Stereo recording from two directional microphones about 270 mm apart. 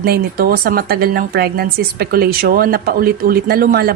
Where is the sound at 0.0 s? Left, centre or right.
Right.